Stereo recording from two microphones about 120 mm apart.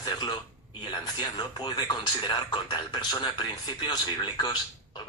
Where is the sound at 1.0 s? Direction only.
35° left (ahead or behind).